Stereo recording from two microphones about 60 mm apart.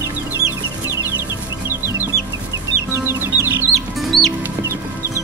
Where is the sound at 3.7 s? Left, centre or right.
Centre.